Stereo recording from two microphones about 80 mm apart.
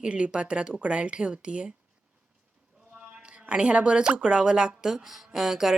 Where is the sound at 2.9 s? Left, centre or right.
Centre.